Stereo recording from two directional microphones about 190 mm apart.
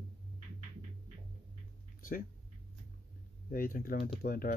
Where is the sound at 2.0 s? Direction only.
45° left (ahead or behind).